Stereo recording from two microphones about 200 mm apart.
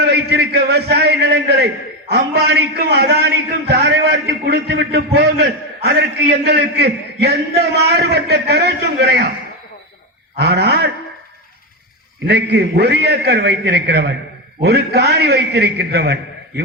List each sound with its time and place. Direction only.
0.0 s a man's voice: 55° right (ahead or behind)
10.3 s a man's voice: 55° right (ahead or behind)
12.3 s a man's voice: 55° right (ahead or behind)